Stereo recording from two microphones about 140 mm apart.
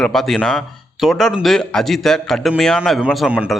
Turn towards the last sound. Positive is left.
turn(degrees=-5)  # may be behind; listen again after turning